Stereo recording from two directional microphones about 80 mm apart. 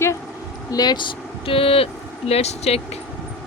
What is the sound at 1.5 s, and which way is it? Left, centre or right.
Speech, left.